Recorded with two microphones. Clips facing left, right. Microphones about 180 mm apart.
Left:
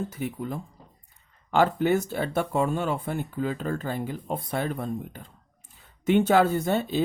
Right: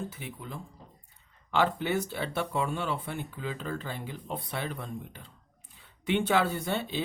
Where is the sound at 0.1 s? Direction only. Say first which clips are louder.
Left 10 dB; 45° left (ahead or behind).